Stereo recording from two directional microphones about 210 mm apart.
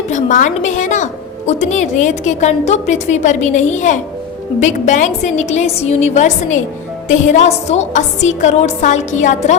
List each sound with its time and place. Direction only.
0.1 s a woman's voice: 35° left (ahead or behind)